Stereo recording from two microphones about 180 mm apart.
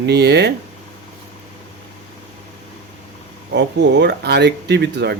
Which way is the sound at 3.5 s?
70° right (ahead or behind).